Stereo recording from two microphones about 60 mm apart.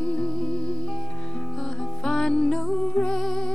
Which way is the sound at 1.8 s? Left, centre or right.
Centre.